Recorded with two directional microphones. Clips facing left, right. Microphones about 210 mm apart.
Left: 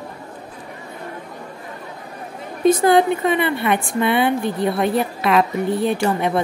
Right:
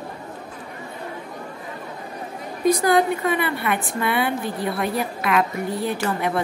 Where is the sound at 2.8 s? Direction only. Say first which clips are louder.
Left 4 dB; 25° left (ahead or behind).